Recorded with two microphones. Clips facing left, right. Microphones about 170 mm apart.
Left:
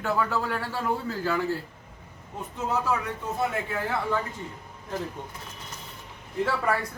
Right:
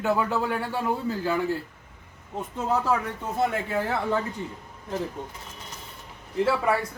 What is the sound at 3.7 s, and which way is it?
Speech, 30° right (ahead or behind).